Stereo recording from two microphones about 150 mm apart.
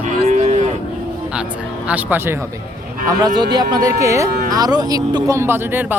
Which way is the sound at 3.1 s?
25° right (ahead or behind).